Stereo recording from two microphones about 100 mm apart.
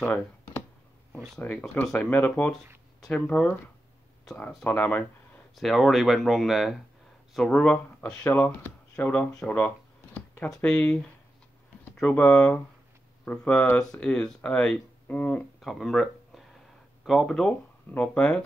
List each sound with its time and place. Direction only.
1.4 s speech: 15° left (ahead or behind)
4.6 s speech: 15° left (ahead or behind)
5.6 s speech: centre (ahead or behind); by 9.3 s 15° left (ahead or behind)
10.1 s a sound: 15° left (ahead or behind)
10.5 s speech: 10° left (ahead or behind)
15.6 s speech: centre (ahead or behind)
17.5 s speech: 10° left (ahead or behind)